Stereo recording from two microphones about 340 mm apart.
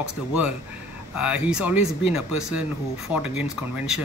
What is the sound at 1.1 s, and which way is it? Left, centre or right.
Speech, centre.